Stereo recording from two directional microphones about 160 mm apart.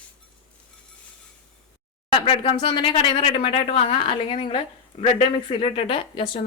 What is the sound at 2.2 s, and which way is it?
Speech, 35° left (ahead or behind).